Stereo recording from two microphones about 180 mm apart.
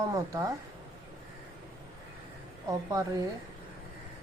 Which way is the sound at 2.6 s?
20° right (ahead or behind).